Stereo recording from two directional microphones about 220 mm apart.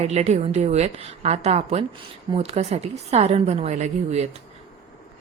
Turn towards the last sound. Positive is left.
turn(degrees=-30)  # may be behind; listen again after turning